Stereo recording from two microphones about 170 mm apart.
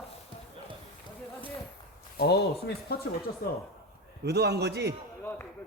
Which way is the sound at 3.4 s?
60° left (ahead or behind).